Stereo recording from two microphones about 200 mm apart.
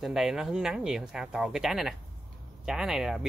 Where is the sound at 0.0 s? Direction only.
Centre (ahead or behind).